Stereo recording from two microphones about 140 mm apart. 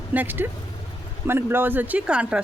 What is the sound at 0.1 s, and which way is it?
Speech, 15° right (ahead or behind).